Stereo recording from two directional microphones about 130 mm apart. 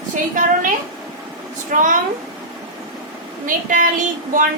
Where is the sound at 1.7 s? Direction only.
90° right.